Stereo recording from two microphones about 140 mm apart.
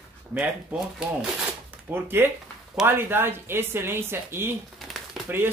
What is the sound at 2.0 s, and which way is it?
Speech, 15° right (ahead or behind).